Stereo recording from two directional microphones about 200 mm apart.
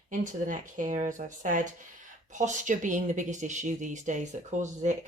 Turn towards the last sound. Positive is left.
turn(degrees=-35)  # may be behind; listen again after turning